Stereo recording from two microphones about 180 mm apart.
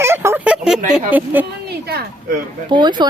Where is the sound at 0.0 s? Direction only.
15° right (ahead or behind).